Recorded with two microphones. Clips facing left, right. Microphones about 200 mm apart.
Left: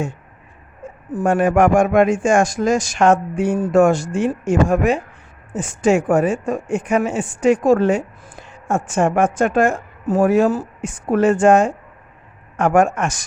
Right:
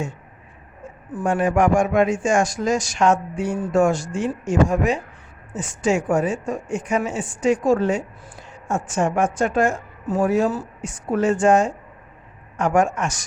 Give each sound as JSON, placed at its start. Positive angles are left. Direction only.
{"t": 1.1, "sound": "speech", "side_deg": 55}